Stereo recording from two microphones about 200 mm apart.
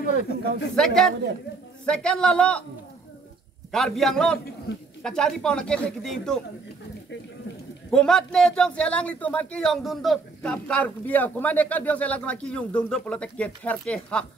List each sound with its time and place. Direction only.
0.2 s speech: 50° left (ahead or behind)
0.7 s speech: 5° left (ahead or behind)
3.7 s speech: centre (ahead or behind)
7.9 s speech: 5° left (ahead or behind)